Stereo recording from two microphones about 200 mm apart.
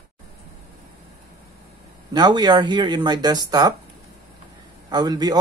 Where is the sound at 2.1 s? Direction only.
20° right (ahead or behind).